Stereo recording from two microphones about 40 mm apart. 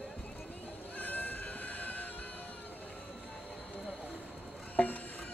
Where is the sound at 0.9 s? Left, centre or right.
Left.